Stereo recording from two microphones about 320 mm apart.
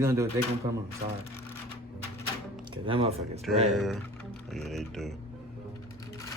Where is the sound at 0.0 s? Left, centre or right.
Centre.